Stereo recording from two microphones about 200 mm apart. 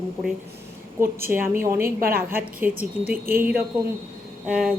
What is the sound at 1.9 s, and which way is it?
Speech, 45° right (ahead or behind).